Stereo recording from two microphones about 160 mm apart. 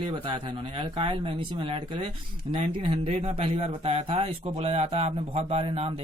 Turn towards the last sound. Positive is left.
turn(degrees=-40)  # may be behind; listen again after turning